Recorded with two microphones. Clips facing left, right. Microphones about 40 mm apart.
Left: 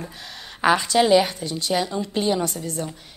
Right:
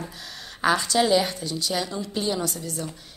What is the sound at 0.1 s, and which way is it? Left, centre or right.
A woman's voice, centre.